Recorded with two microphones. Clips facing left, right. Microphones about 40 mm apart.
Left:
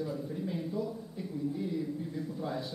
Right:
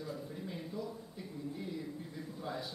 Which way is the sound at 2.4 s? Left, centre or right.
Centre.